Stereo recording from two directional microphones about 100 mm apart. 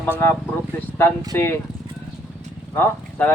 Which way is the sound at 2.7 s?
20° left (ahead or behind).